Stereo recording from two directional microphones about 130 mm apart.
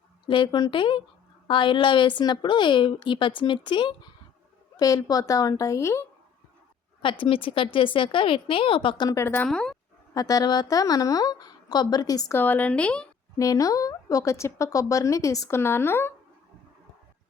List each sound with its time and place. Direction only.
0.3 s a woman's voice: 35° left (ahead or behind); by 6.1 s 20° left (ahead or behind)
7.0 s a woman's voice: 40° left (ahead or behind)
9.0 s speech: 20° left (ahead or behind)
9.5 s speech: 5° left (ahead or behind)
10.2 s speech: 30° left (ahead or behind)
12.3 s speech: 15° left (ahead or behind)
13.4 s speech: 25° left (ahead or behind)